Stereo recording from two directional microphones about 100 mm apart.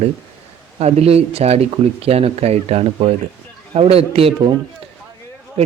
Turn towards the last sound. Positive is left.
turn(degrees=-80)